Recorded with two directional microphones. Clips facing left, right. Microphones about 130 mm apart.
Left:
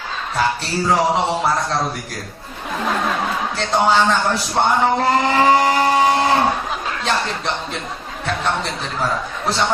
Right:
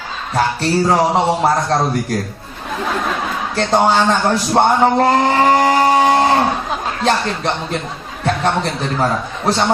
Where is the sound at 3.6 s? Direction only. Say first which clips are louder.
Right 3 dB; 45° right (ahead or behind).